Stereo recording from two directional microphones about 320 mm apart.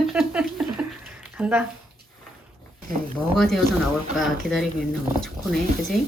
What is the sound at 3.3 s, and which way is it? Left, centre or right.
Speech, centre.